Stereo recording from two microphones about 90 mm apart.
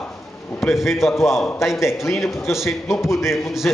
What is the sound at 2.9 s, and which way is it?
Speech, 30° left (ahead or behind).